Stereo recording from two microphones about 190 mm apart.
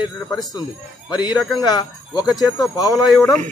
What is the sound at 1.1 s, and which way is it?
A man's voice, 20° left (ahead or behind).